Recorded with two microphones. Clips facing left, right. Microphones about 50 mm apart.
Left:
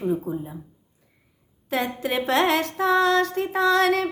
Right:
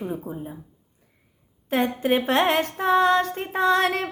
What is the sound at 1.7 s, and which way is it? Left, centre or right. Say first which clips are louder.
Female singing: right 3 dB; right.